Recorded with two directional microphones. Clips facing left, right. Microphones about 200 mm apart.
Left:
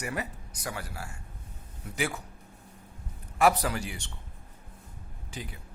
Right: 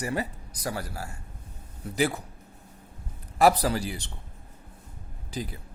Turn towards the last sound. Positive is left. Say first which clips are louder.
# right 6 dB
turn(degrees=-35)  # may be behind; listen again after turning